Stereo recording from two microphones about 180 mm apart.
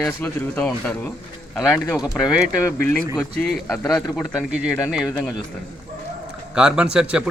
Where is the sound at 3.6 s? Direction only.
15° left (ahead or behind).